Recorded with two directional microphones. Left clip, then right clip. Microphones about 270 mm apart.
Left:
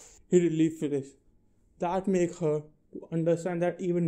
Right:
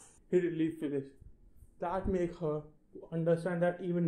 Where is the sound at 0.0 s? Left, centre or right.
Left.